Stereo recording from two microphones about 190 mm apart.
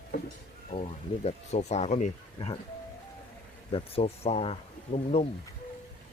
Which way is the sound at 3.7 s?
30° left (ahead or behind).